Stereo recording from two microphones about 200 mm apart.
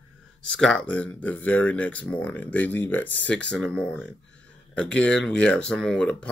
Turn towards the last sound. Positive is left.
turn(degrees=5)  # may be behind; listen again after turning